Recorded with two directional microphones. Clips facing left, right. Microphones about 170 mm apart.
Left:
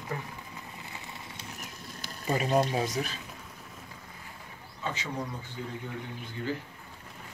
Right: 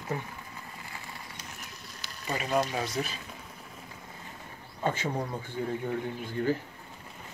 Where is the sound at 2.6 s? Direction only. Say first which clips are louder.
Left 2 dB; 25° left (ahead or behind).